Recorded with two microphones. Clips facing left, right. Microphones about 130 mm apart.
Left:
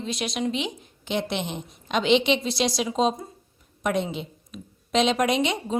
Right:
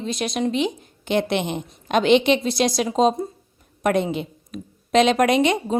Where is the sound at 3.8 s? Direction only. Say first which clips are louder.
Right 5 dB; 55° right (ahead or behind).